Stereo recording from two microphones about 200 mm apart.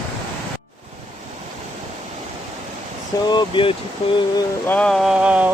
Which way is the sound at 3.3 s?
25° left (ahead or behind).